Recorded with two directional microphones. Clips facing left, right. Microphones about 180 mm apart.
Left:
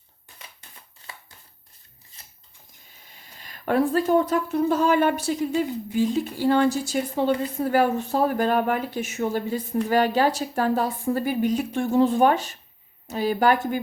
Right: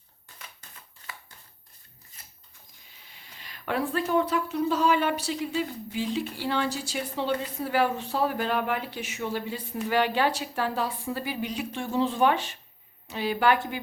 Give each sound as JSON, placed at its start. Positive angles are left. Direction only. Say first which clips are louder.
{"t": 3.2, "sound": "a woman's voice", "louder": "left 6 dB", "side_deg": 45}